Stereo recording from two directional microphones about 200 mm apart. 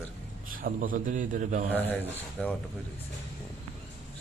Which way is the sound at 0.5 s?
45° right (ahead or behind).